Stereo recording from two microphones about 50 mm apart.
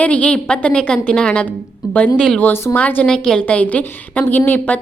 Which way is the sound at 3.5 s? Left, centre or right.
Left.